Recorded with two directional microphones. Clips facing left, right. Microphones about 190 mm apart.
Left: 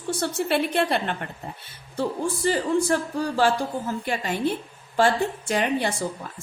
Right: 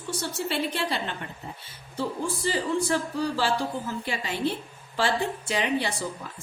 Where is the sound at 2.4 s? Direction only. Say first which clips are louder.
Left 5 dB; 50° left (ahead or behind).